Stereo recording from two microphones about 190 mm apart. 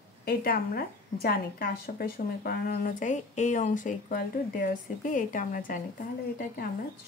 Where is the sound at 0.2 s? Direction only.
50° left (ahead or behind).